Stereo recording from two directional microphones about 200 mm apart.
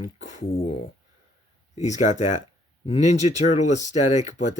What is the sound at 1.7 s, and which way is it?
Speech, 35° left (ahead or behind).